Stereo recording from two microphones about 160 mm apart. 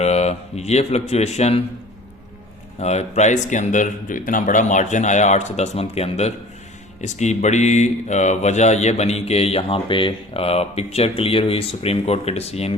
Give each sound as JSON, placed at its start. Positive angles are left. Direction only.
{"t": 0.0, "sound": "speech", "side_deg": 40}
{"t": 2.7, "sound": "speech", "side_deg": 45}